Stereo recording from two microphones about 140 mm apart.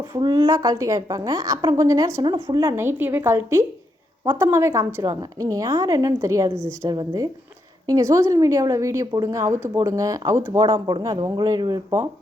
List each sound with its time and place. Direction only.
0.1 s a woman's voice: 25° right (ahead or behind)
2.2 s speech: 30° right (ahead or behind)
2.7 s a woman's voice: 15° right (ahead or behind)